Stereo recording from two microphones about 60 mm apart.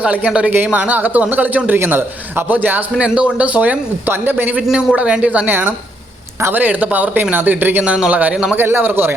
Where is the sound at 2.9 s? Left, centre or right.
Centre.